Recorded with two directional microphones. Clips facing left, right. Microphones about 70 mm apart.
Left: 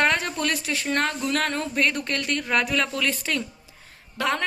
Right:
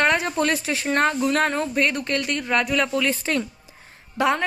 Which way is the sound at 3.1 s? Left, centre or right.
Right.